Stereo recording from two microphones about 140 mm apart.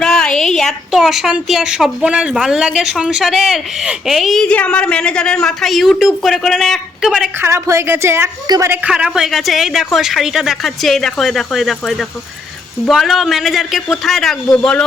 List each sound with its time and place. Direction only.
0.0 s a woman's voice: 5° left (ahead or behind)
7.4 s a woman's voice: 20° right (ahead or behind)
8.8 s a woman's voice: 10° right (ahead or behind)